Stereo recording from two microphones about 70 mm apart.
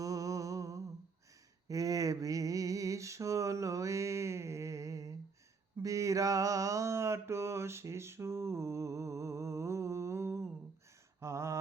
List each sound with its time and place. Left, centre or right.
0.0 s humming: right
1.6 s mantra: right
11.2 s a sound: right